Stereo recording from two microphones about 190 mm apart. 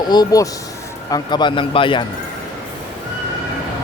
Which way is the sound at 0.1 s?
20° left (ahead or behind).